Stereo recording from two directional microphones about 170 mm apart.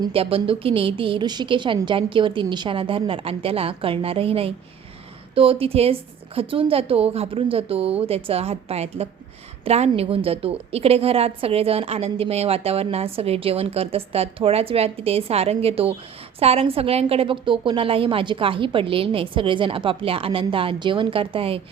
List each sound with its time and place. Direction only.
0.0 s a woman's voice: 30° right (ahead or behind)